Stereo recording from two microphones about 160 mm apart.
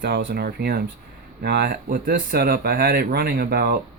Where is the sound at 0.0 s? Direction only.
85° right.